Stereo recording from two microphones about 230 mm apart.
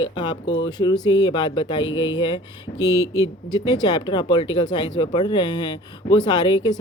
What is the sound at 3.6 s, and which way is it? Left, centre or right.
Speech, centre.